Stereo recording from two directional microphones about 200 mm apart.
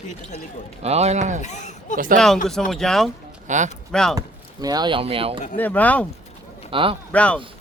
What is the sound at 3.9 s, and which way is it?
Speech, 5° left (ahead or behind).